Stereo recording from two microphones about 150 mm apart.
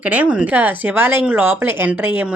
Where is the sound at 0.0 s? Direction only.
10° right (ahead or behind).